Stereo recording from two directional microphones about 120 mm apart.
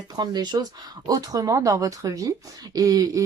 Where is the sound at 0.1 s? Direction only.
35° right (ahead or behind).